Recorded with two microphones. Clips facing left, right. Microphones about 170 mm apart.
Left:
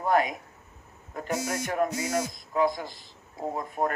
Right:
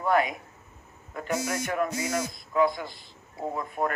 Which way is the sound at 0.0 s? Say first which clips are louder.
Even; 45° left (ahead or behind).